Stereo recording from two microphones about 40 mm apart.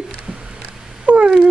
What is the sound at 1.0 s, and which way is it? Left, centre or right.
Cat, right.